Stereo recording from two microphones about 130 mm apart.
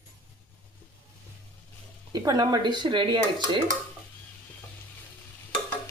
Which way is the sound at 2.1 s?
30° right (ahead or behind).